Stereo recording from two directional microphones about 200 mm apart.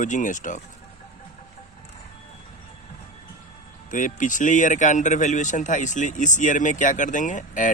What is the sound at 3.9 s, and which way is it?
A man's voice, 40° left (ahead or behind).